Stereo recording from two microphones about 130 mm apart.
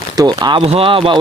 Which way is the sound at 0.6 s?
45° right (ahead or behind).